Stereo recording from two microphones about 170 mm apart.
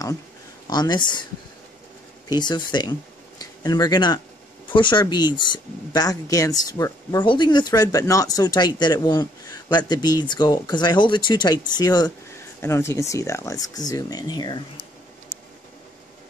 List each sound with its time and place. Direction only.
0.7 s speech: 25° left (ahead or behind)
2.2 s speech: 25° left (ahead or behind)